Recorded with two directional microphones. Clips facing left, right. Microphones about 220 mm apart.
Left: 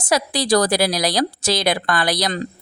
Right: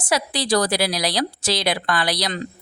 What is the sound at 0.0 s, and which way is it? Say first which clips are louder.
A woman's voice: left 3 dB; 40° left (ahead or behind).